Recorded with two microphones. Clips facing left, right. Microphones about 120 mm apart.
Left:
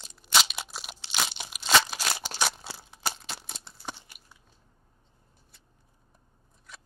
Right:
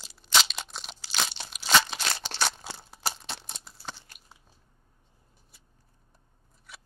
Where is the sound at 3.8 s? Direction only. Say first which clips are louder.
Left 2 dB; 15° left (ahead or behind).